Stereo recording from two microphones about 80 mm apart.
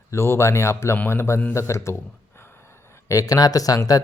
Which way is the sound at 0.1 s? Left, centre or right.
Left.